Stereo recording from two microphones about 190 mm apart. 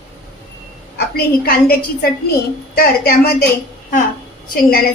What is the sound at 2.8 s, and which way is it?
Speech, 55° left (ahead or behind).